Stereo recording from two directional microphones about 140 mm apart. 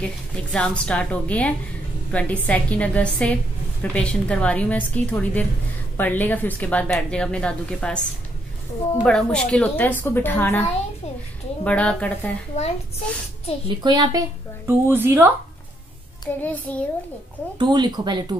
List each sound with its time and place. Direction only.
0.0 s a woman's voice: 5° left (ahead or behind)
9.0 s a woman's voice: 5° left (ahead or behind)
12.5 s a child's voice: 55° left (ahead or behind)
13.7 s speech: 30° right (ahead or behind)
14.7 s speech: 15° right (ahead or behind)
16.3 s a woman's voice: 10° left (ahead or behind)
17.6 s speech: 30° right (ahead or behind)